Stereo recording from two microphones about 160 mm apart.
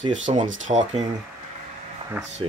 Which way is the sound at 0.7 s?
30° right (ahead or behind).